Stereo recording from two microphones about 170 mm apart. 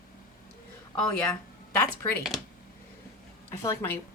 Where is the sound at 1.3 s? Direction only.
15° left (ahead or behind).